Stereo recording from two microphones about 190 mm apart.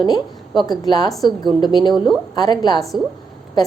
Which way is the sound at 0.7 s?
20° left (ahead or behind).